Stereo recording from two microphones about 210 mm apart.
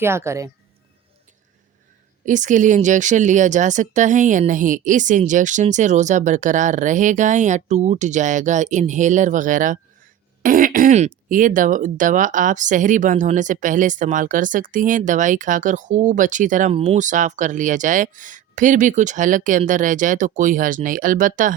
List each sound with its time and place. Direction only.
0.0 s a woman's voice: 10° right (ahead or behind)
2.2 s speech: 35° right (ahead or behind)